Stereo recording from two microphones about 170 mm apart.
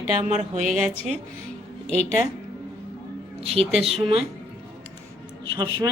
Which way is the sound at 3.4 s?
35° right (ahead or behind).